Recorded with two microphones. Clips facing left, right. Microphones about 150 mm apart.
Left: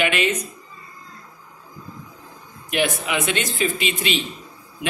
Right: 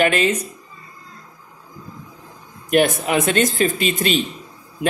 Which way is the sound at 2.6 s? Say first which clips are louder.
Right 6 dB; 45° right (ahead or behind).